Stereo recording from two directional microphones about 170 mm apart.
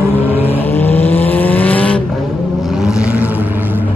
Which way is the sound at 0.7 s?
10° left (ahead or behind).